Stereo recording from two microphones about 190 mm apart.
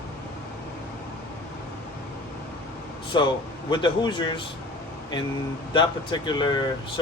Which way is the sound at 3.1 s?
25° left (ahead or behind).